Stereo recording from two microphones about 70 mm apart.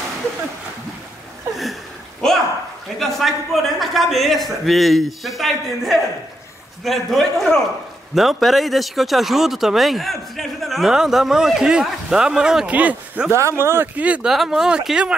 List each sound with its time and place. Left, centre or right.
2.2 s a sound: centre
3.0 s speech: centre
12.7 s speech: right
13.3 s speech: right
13.9 s speech: centre
14.2 s speech: centre